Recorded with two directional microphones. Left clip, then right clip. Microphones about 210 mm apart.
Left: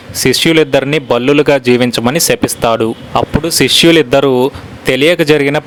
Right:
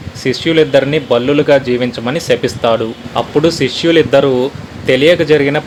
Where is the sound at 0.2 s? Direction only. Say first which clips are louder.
Left 2 dB; 35° left (ahead or behind).